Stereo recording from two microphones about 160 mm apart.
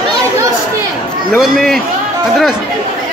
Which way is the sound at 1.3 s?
Centre (ahead or behind).